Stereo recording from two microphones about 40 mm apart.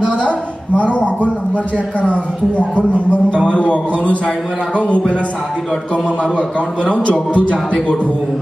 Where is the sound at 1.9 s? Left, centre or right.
Left.